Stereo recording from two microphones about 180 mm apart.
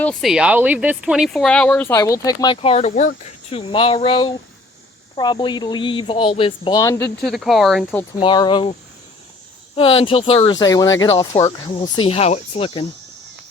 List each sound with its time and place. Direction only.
0.0 s speech: centre (ahead or behind); by 7.1 s 20° left (ahead or behind)
7.2 s speech: centre (ahead or behind)
8.2 s speech: 25° left (ahead or behind)
9.7 s speech: 30° left (ahead or behind)
11.9 s speech: 30° left (ahead or behind)